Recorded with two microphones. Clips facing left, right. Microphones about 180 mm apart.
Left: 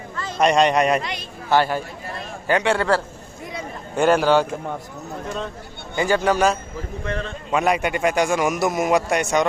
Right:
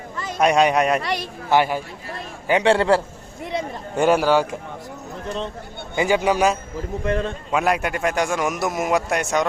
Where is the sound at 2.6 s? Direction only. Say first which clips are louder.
Right 5 dB; 25° right (ahead or behind).